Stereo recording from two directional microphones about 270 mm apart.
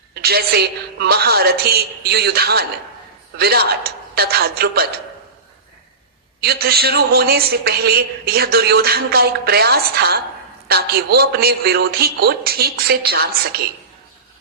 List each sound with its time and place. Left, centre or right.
0.1 s a man's voice: right
6.4 s a man's voice: right